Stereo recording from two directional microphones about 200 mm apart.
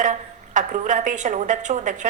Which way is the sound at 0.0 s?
40° right (ahead or behind).